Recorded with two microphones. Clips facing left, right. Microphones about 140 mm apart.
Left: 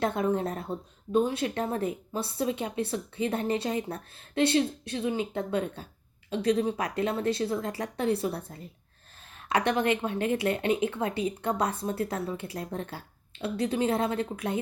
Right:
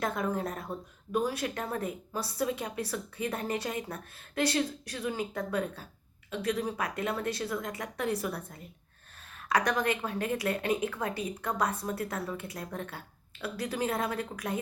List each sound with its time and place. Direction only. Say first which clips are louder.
0.0 s a woman's voice: left 4 dB; 30° left (ahead or behind)